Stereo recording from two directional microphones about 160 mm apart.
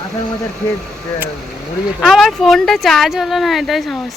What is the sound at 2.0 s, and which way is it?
Speech, centre (ahead or behind).